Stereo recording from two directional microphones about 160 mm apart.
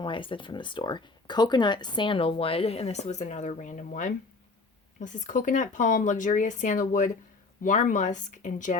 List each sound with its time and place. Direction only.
0.0 s speech: 30° left (ahead or behind); by 8.8 s 50° left (ahead or behind)